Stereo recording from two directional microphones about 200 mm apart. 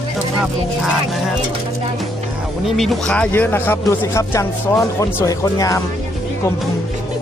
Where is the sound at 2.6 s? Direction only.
Centre (ahead or behind); by 5.8 s 15° left (ahead or behind).